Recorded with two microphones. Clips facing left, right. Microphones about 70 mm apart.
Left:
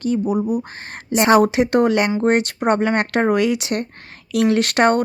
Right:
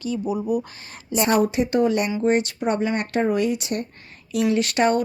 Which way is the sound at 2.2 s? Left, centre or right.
Left.